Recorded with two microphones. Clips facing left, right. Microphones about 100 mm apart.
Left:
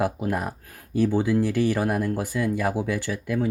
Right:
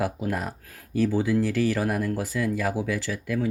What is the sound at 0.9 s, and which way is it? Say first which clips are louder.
Speech: left 1 dB; 25° left (ahead or behind).